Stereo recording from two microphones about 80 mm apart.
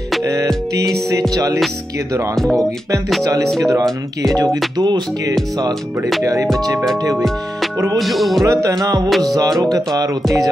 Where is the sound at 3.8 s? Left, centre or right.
Centre.